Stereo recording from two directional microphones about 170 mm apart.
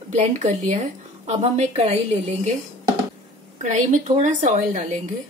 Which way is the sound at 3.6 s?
45° right (ahead or behind).